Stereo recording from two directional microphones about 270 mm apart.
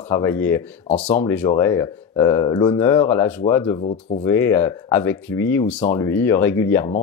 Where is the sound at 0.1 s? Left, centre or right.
Centre.